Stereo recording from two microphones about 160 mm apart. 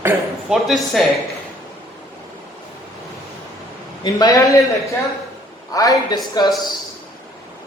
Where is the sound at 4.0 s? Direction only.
25° left (ahead or behind).